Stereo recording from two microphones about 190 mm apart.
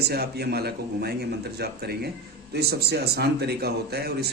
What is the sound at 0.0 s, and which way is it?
A man's voice, 55° right (ahead or behind).